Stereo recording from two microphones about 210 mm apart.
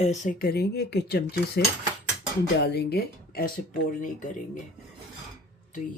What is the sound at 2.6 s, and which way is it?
Speech, 50° left (ahead or behind).